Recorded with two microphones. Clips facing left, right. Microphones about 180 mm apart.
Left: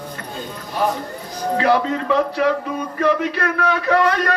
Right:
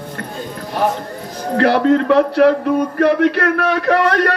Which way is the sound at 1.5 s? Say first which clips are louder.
Right 5 dB; 70° right (ahead or behind).